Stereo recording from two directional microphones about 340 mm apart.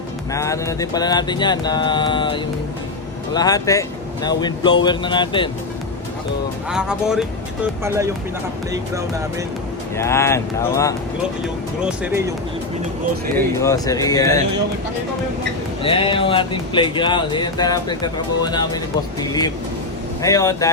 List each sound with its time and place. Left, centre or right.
0.3 s speech: centre
6.7 s speech: centre
10.0 s speech: centre
11.4 s speech: centre
13.3 s speech: centre
15.8 s speech: centre
20.2 s speech: centre